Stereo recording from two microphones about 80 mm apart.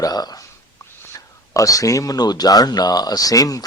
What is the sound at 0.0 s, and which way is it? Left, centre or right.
Speech, left.